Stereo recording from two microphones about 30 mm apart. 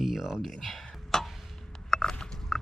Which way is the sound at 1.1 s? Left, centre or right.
Left.